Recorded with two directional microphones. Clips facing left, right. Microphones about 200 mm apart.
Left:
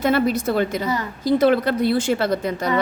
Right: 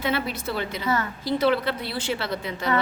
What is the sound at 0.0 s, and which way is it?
A woman's voice, 45° left (ahead or behind).